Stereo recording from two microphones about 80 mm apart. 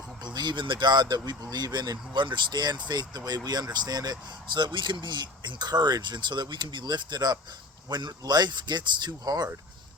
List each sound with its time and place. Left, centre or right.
0.3 s speech: right